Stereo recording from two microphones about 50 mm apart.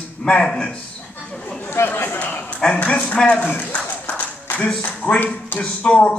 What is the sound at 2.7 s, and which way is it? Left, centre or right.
Speech, left.